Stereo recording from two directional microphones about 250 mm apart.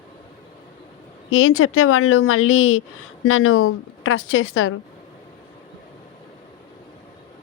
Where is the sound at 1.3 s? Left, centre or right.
Left.